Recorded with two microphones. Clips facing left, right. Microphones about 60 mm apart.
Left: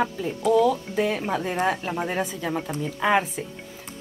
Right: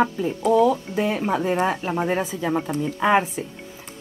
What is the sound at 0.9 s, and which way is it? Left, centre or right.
Speech, centre.